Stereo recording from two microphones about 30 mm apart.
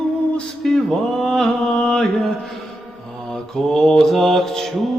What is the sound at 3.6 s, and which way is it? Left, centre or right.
Mantra, centre.